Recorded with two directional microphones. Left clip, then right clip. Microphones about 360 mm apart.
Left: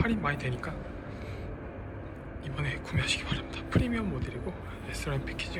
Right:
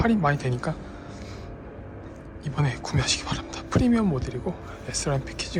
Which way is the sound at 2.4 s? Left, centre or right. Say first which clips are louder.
Right 6 dB; centre.